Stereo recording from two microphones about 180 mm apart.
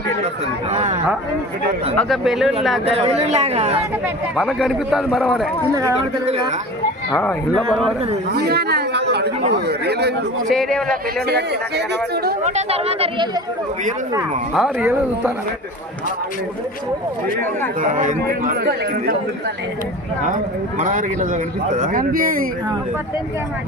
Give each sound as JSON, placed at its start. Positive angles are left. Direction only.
{"t": 0.7, "sound": "speech", "side_deg": -35}
{"t": 2.0, "sound": "a man's voice", "side_deg": 0}
{"t": 2.8, "sound": "speech", "side_deg": -35}
{"t": 4.4, "sound": "a man's voice", "side_deg": 0}
{"t": 6.0, "sound": "speech", "side_deg": -30}
{"t": 7.2, "sound": "a man's voice", "side_deg": 5}
{"t": 8.4, "sound": "a man's voice", "side_deg": -60}
{"t": 10.5, "sound": "a man's voice", "side_deg": 0}
{"t": 12.4, "sound": "speech", "side_deg": -40}
{"t": 14.5, "sound": "speech", "side_deg": -5}
{"t": 17.7, "sound": "speech", "side_deg": -45}
{"t": 20.2, "sound": "speech", "side_deg": -45}